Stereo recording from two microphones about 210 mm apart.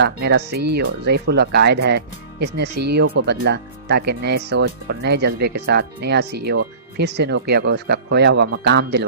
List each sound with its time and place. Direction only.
0.0 s speech: 50° right (ahead or behind)